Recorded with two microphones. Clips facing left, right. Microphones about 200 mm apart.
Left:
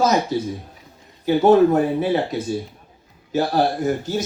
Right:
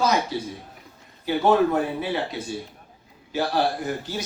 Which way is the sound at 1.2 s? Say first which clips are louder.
Left 6 dB; 45° left (ahead or behind).